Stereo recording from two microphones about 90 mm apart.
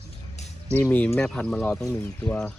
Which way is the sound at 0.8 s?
20° left (ahead or behind).